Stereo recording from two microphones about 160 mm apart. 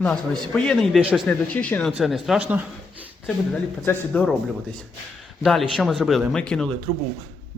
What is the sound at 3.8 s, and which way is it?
Speech, 10° left (ahead or behind).